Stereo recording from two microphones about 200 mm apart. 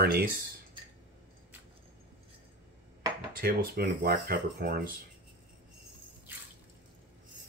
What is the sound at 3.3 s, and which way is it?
Speech, 45° right (ahead or behind).